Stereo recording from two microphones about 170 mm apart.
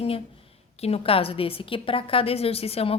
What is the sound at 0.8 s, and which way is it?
A woman's voice, 35° left (ahead or behind).